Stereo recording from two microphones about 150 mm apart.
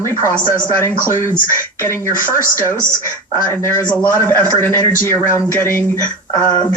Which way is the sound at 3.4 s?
15° left (ahead or behind).